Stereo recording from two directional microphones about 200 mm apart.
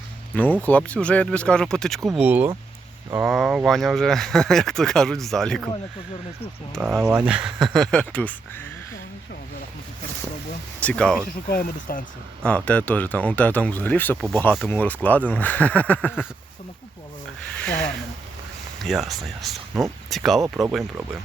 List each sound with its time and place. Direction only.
0.6 s speech: 5° left (ahead or behind)
6.8 s speech: 5° right (ahead or behind)
10.8 s speech: 5° left (ahead or behind)
11.4 s speech: 45° left (ahead or behind)
12.4 s speech: 5° left (ahead or behind)
17.6 s speech: 5° left (ahead or behind)